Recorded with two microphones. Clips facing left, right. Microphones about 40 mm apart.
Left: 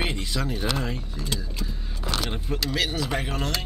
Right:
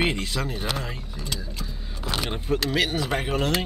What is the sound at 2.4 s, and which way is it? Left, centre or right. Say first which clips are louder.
Speech: right 5 dB; right.